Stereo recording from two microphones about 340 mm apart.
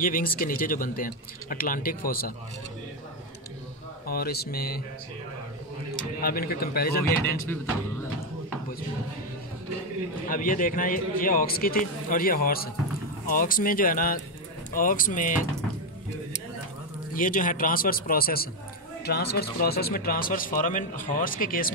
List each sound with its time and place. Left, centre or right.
0.0 s speech: left
4.1 s speech: left
6.2 s speech: left
10.2 s speech: left
17.1 s speech: left